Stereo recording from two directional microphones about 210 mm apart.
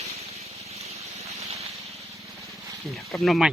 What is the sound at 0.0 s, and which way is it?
Vehicle, 30° right (ahead or behind).